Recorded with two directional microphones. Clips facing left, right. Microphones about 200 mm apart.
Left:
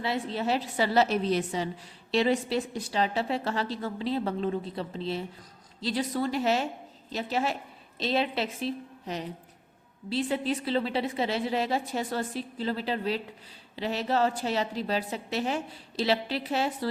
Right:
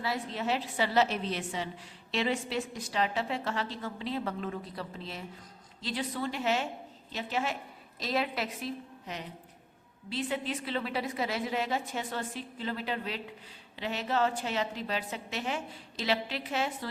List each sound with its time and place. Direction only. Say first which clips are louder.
0.0 s a woman's voice: left 4 dB; 30° left (ahead or behind)